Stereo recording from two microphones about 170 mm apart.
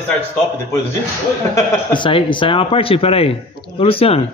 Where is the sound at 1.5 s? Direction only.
30° left (ahead or behind).